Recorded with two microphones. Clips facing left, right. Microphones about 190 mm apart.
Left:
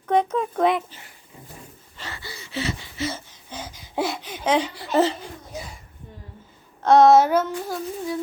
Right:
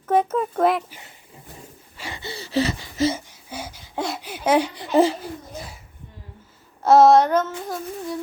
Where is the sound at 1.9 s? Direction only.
10° right (ahead or behind).